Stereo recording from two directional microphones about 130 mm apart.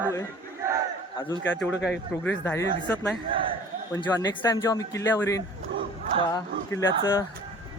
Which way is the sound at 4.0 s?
30° left (ahead or behind).